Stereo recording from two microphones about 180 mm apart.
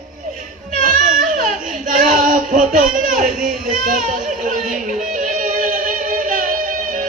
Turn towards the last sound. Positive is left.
turn(degrees=-45)  # may be behind; listen again after turning